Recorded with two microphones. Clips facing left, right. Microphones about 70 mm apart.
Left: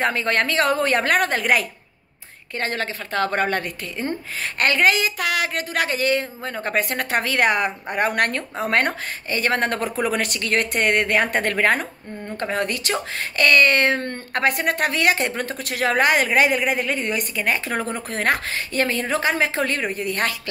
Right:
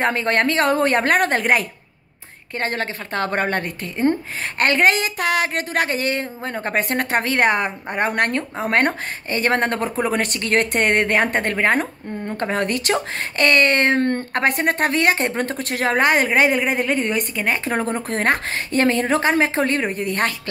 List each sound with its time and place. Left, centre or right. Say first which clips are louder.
0.0 s a woman's voice: right 2 dB; right
8.8 s a woman's voice: right 3 dB; right
11.4 s speech: right 1 dB; right
11.8 s speech: right 5 dB; right
14.3 s a woman's voice: right 2 dB; right